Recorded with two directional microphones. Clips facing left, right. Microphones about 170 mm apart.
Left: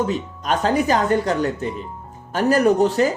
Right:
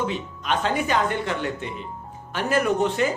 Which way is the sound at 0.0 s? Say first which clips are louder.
Left 5 dB; 40° left (ahead or behind).